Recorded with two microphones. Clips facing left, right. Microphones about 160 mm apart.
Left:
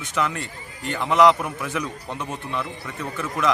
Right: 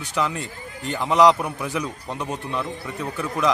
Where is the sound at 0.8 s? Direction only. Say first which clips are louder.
Right 1 dB; centre (ahead or behind).